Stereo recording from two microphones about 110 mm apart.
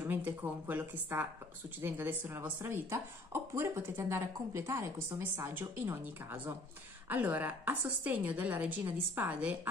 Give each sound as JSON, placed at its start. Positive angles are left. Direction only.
{"t": 0.0, "sound": "a woman's voice", "side_deg": -15}